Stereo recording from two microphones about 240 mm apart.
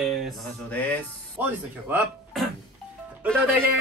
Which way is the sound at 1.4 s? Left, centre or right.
Centre.